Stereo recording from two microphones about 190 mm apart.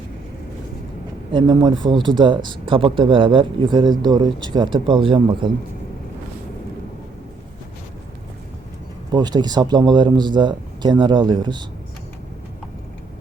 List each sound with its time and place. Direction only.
1.3 s speech: 25° right (ahead or behind)
9.1 s speech: 20° right (ahead or behind)